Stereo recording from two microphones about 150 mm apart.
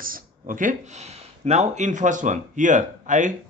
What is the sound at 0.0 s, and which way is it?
Speech, 65° right (ahead or behind).